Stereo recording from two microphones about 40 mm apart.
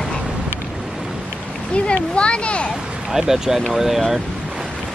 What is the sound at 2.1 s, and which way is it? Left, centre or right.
Speech, left.